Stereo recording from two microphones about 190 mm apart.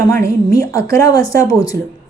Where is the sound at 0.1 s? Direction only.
15° left (ahead or behind).